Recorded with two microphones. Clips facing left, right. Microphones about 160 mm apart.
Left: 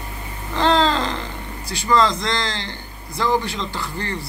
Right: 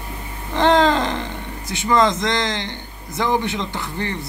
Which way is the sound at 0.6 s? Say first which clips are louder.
Right 2 dB; 20° right (ahead or behind).